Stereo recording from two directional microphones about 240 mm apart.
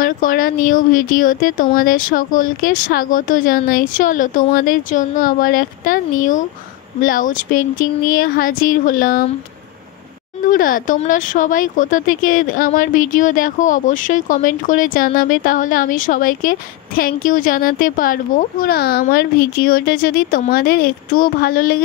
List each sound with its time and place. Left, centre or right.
0.0 s speech: left
10.5 s speech: left